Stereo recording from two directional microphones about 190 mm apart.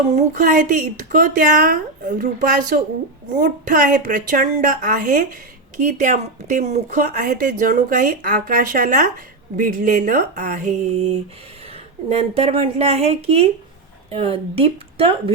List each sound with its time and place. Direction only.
0.1 s a woman's voice: 35° right (ahead or behind)